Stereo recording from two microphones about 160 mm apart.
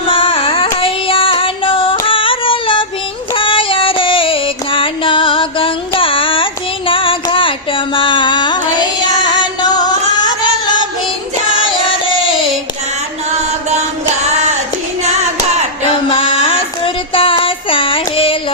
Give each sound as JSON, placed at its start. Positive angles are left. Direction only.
{"t": 0.1, "sound": "carnatic music", "side_deg": 35}
{"t": 3.3, "sound": "female singing", "side_deg": 30}
{"t": 11.6, "sound": "music", "side_deg": 30}
{"t": 13.7, "sound": "music", "side_deg": -45}
{"t": 16.0, "sound": "a sound", "side_deg": 35}